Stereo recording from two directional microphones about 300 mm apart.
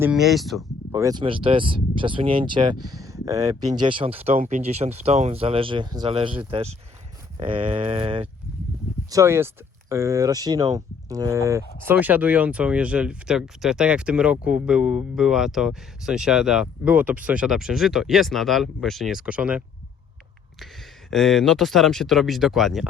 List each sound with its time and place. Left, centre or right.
0.0 s speech: centre
0.9 s speech: centre
21.1 s speech: centre